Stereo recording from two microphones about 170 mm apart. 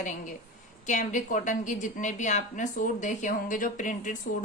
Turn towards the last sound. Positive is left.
turn(degrees=50)  # may be behind; listen again after turning